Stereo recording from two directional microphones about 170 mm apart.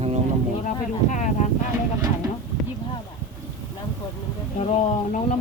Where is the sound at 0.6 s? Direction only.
45° left (ahead or behind).